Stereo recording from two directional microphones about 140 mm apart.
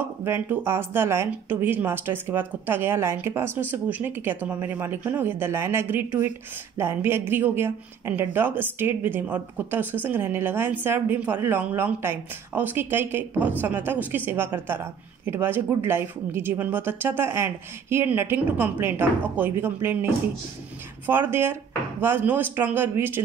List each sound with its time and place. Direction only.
0.2 s speech: 15° right (ahead or behind)
21.1 s speech: 15° right (ahead or behind)